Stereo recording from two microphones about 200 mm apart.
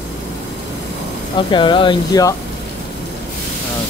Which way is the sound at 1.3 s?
25° left (ahead or behind).